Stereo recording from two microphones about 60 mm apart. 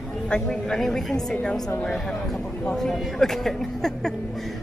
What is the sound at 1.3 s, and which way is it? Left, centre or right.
Speech, centre.